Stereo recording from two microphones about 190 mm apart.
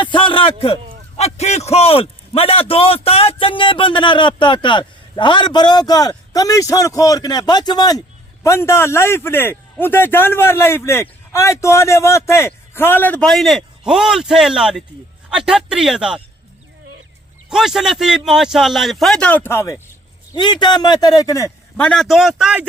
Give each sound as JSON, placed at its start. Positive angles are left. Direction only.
{"t": 0.0, "sound": "a sound", "side_deg": 25}
{"t": 1.1, "sound": "a man's voice", "side_deg": 35}
{"t": 17.5, "sound": "a man's voice", "side_deg": 0}
{"t": 21.8, "sound": "a man's voice", "side_deg": 0}